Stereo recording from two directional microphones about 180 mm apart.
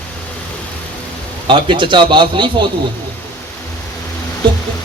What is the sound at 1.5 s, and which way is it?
A man's voice, 25° right (ahead or behind).